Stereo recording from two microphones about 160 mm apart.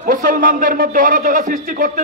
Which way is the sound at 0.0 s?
60° right (ahead or behind).